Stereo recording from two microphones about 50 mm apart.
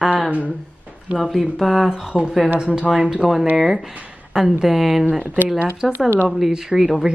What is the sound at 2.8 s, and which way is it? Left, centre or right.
Speech, centre.